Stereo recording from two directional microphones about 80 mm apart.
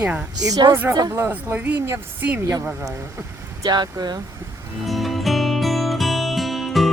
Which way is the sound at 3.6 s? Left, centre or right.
Right.